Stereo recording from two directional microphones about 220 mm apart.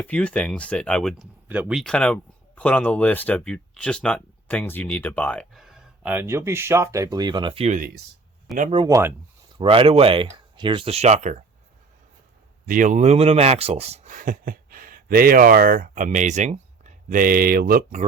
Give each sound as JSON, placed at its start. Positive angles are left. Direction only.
{"t": 0.0, "sound": "speech", "side_deg": 5}
{"t": 8.8, "sound": "speech", "side_deg": -15}
{"t": 9.6, "sound": "speech", "side_deg": -25}
{"t": 12.6, "sound": "speech", "side_deg": -35}